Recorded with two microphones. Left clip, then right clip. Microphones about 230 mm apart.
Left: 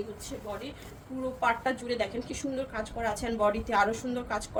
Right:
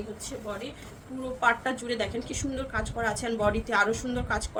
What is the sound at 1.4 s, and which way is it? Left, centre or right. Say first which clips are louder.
A woman's voice: right 3 dB; centre.